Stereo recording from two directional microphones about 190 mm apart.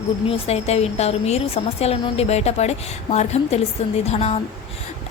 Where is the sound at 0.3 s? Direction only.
30° left (ahead or behind).